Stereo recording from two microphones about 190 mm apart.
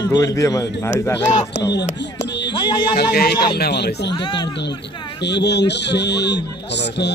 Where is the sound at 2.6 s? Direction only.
25° left (ahead or behind).